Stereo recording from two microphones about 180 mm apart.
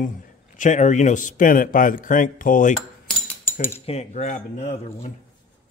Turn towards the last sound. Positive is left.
turn(degrees=35)  # may be behind; listen again after turning